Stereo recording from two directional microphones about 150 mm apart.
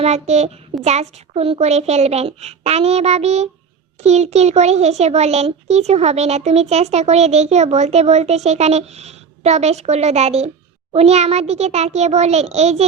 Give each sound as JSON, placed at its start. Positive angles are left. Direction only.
{"t": 0.0, "sound": "a child's voice", "side_deg": -45}